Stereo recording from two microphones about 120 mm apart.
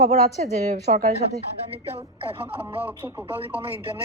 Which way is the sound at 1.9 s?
55° right (ahead or behind).